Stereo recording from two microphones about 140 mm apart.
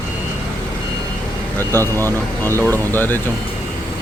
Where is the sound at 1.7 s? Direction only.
15° left (ahead or behind).